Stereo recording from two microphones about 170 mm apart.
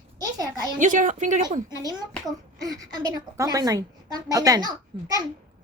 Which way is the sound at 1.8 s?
25° right (ahead or behind).